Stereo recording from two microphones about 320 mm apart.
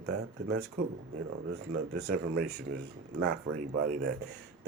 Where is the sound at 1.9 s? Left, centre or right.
Right.